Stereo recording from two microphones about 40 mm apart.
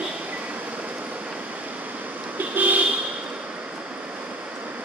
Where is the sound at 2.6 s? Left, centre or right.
Right.